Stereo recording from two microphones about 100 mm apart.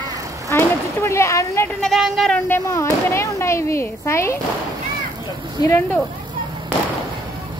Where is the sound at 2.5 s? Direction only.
25° left (ahead or behind).